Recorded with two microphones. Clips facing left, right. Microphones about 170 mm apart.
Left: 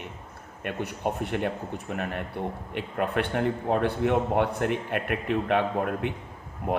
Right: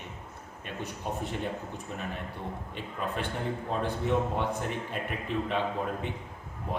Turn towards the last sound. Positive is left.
turn(degrees=65)  # may be behind; listen again after turning